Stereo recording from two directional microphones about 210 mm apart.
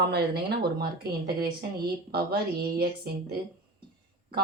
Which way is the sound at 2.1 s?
50° right (ahead or behind).